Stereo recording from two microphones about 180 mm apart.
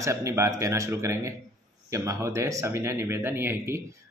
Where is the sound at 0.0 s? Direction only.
15° right (ahead or behind).